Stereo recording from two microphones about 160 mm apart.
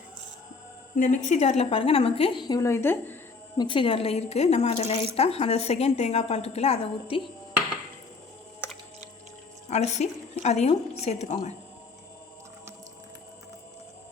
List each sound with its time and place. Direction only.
0.9 s speech: 50° left (ahead or behind); by 3.2 s 15° left (ahead or behind)
3.6 s speech: 30° left (ahead or behind)
9.6 s a woman's voice: 45° left (ahead or behind)